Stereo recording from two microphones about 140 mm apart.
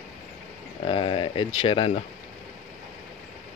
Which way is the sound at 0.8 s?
40° left (ahead or behind).